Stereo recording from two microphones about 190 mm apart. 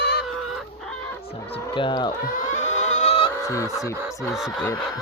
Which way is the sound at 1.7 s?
25° left (ahead or behind).